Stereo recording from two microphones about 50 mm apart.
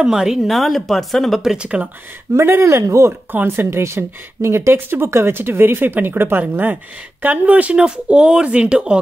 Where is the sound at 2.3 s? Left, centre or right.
Right.